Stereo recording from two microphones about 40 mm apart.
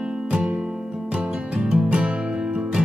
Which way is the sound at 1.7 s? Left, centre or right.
Right.